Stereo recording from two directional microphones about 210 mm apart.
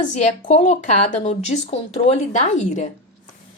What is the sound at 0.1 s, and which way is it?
A woman's voice, 35° left (ahead or behind).